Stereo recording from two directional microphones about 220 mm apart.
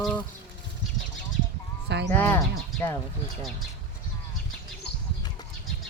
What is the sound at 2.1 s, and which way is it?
Speech, 10° left (ahead or behind).